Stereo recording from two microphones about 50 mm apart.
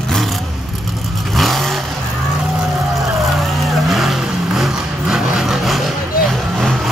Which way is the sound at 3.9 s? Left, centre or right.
Centre.